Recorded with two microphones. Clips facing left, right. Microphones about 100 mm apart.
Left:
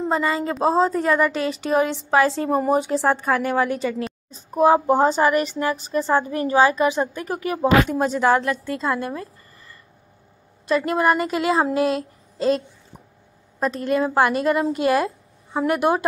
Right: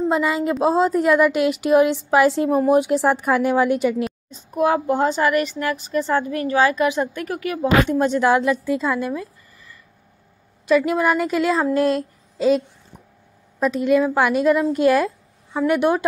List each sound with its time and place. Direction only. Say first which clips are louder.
0.0 s speech: right 2 dB; 5° right (ahead or behind)
4.3 s a woman's voice: left 4 dB; 40° left (ahead or behind)
7.9 s a woman's voice: right 2 dB; centre (ahead or behind)
10.9 s a woman's voice: even; centre (ahead or behind)